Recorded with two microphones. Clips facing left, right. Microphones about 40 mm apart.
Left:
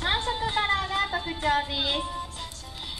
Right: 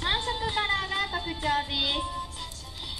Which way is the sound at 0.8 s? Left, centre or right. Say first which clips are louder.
Left 2 dB; centre.